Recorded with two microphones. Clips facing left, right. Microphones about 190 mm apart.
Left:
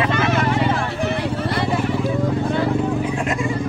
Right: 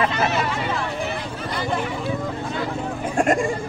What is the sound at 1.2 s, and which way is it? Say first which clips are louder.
Vehicle: left 6 dB; 70° left (ahead or behind).